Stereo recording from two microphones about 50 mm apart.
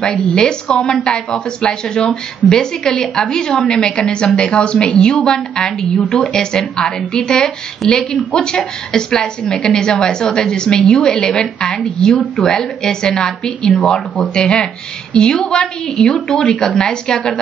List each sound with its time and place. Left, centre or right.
0.0 s a woman's voice: centre